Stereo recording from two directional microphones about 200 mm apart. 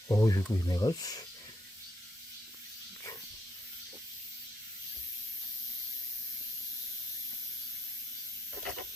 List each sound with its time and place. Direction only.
0.1 s speech: 15° left (ahead or behind)